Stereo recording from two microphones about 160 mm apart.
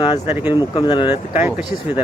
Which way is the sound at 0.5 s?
30° left (ahead or behind).